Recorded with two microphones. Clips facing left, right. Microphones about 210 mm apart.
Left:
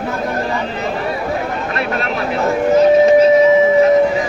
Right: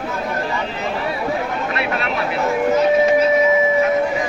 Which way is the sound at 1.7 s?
40° left (ahead or behind).